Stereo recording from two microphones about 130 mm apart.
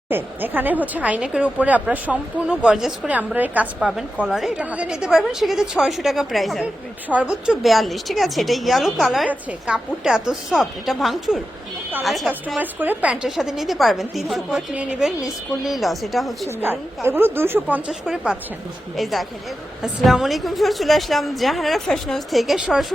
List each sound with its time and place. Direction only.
0.1 s a woman's voice: 15° right (ahead or behind)
12.5 s a woman's voice: 15° right (ahead or behind)
16.6 s a woman's voice: 15° right (ahead or behind)
19.8 s a woman's voice: centre (ahead or behind)